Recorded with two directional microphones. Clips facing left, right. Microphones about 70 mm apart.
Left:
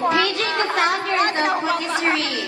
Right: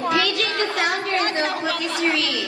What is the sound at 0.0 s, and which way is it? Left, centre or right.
Chatter, left.